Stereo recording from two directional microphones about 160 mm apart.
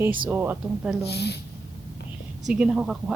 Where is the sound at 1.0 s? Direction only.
90° left.